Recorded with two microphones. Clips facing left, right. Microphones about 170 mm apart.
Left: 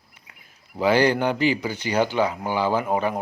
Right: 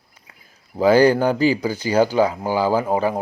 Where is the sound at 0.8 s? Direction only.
40° right (ahead or behind).